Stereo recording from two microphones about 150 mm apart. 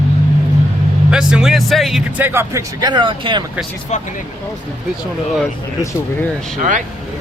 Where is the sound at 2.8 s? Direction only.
30° right (ahead or behind).